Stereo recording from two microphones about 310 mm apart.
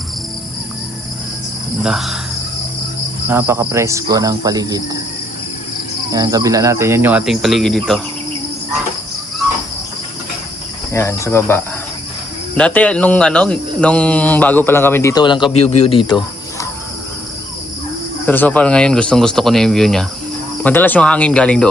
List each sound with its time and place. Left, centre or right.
1.8 s speech: centre
3.2 s speech: centre
6.1 s speech: centre
10.9 s cricket: centre
12.5 s speech: centre
18.3 s speech: centre